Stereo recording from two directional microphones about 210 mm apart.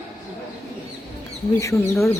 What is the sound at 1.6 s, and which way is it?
Speech, 15° left (ahead or behind).